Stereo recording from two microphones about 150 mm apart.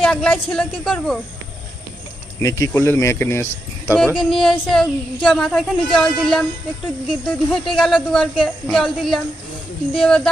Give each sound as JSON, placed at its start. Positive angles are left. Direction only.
{"t": 0.0, "sound": "speech", "side_deg": 5}
{"t": 2.4, "sound": "speech", "side_deg": 20}
{"t": 3.9, "sound": "speech", "side_deg": 5}